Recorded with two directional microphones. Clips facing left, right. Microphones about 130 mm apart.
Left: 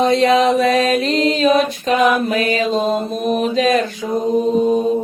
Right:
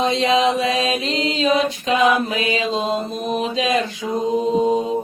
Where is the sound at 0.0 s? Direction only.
50° left (ahead or behind).